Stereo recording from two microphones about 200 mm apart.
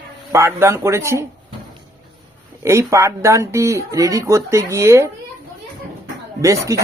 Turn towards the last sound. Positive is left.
turn(degrees=-15)  # may be behind; listen again after turning